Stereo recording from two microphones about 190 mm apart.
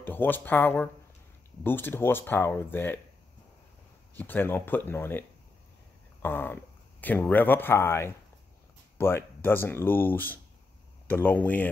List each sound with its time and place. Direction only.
0.0 s speech: 10° left (ahead or behind)
4.1 s speech: 10° left (ahead or behind)
6.2 s speech: 10° left (ahead or behind)